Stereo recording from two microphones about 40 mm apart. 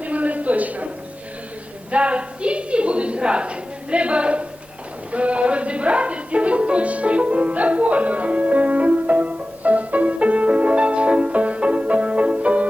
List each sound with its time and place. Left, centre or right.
0.0 s a sound: right
1.9 s a woman's voice: right
5.1 s music: right